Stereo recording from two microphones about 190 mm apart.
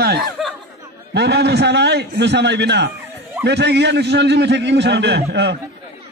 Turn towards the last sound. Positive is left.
turn(degrees=-65)  # may be behind; listen again after turning